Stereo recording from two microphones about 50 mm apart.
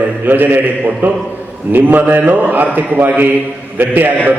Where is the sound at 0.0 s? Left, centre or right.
Right.